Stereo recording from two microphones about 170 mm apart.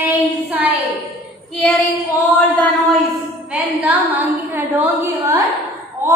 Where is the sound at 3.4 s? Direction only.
10° right (ahead or behind).